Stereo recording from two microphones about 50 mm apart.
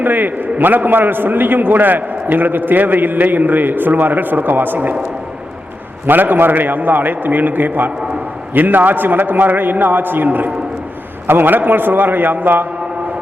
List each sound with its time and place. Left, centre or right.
0.0 s a man's voice: right
6.1 s a man's voice: right